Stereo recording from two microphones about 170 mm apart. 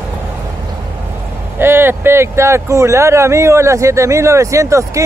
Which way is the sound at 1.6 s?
15° right (ahead or behind).